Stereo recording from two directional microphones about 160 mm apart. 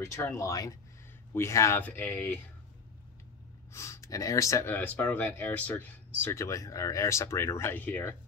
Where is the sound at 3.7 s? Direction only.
20° left (ahead or behind).